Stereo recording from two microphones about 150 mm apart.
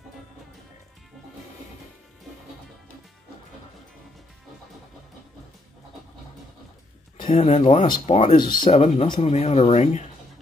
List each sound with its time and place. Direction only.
7.2 s a sound: 30° left (ahead or behind)
7.4 s speech: 45° left (ahead or behind)
8.4 s speech: 30° left (ahead or behind)
8.7 s speech: 45° left (ahead or behind)